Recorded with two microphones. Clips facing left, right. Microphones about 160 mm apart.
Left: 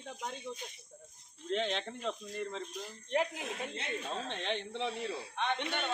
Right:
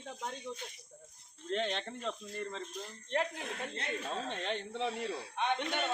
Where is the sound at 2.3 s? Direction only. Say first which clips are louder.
Left 1 dB; 10° left (ahead or behind).